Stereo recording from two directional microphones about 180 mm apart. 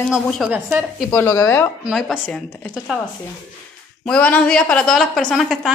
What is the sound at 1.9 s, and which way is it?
A woman's voice, centre (ahead or behind).